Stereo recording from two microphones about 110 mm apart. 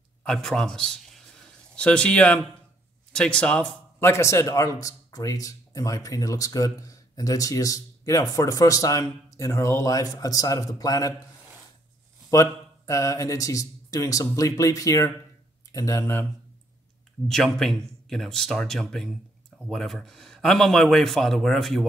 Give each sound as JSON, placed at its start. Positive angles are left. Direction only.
{"t": 0.2, "sound": "a man's voice", "side_deg": 5}
{"t": 4.0, "sound": "speech", "side_deg": 25}
{"t": 12.3, "sound": "speech", "side_deg": 25}
{"t": 17.3, "sound": "a man's voice", "side_deg": 5}